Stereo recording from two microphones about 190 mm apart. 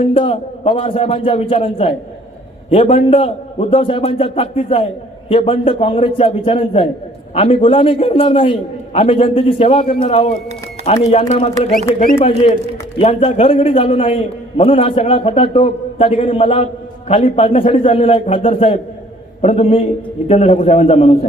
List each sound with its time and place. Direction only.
0.0 s a man's voice: 30° left (ahead or behind)
13.0 s a man's voice: 35° left (ahead or behind)